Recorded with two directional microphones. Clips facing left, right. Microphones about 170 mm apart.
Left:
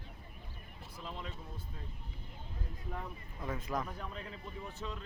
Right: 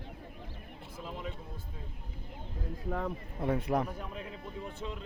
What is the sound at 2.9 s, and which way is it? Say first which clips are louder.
Speech: right 10 dB; 90° right.